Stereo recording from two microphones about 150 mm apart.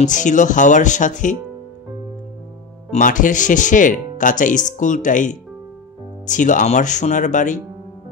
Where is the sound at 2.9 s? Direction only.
60° left (ahead or behind).